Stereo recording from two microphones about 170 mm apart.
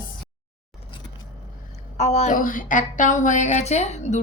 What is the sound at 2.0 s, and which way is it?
A woman's voice, 40° left (ahead or behind).